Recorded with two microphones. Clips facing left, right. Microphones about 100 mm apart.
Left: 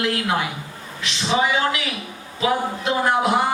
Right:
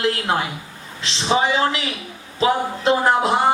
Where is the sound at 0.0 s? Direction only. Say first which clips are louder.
Right 1 dB; 30° right (ahead or behind).